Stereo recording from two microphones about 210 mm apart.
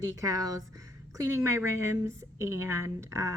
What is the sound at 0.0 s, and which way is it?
A woman's voice, 15° right (ahead or behind).